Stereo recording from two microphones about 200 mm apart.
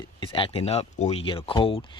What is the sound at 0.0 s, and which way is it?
Speech, 25° left (ahead or behind).